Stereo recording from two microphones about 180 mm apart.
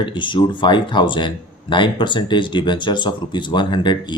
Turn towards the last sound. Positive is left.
turn(degrees=25)  # may be behind; listen again after turning